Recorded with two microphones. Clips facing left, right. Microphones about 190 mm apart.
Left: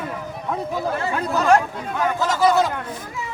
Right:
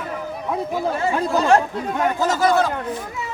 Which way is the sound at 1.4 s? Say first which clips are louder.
Even; 30° right (ahead or behind).